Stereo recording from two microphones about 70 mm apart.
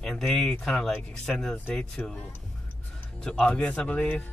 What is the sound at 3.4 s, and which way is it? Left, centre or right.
Speech, centre.